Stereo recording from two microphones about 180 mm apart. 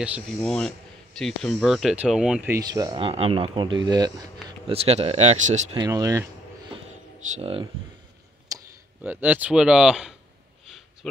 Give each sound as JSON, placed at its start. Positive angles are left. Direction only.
{"t": 0.4, "sound": "speech", "side_deg": 5}
{"t": 2.6, "sound": "speech", "side_deg": -20}
{"t": 5.8, "sound": "speech", "side_deg": -20}
{"t": 7.3, "sound": "speech", "side_deg": -30}
{"t": 8.5, "sound": "speech", "side_deg": -15}